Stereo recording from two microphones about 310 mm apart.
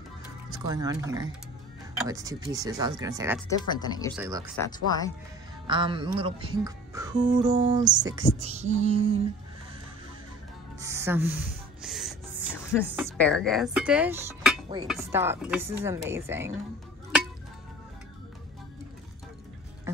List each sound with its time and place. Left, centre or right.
0.5 s speech: centre
3.4 s speech: centre
4.2 s speech: centre
4.6 s speech: centre
5.7 s speech: centre
8.4 s a sound: right
10.8 s speech: centre
11.8 s music: centre
13.2 s speech: centre